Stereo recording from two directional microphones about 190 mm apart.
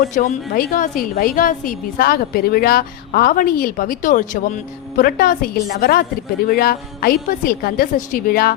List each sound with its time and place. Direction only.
0.0 s a woman's voice: 45° left (ahead or behind)